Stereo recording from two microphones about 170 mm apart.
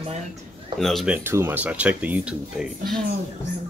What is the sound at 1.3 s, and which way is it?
Speech, 15° right (ahead or behind).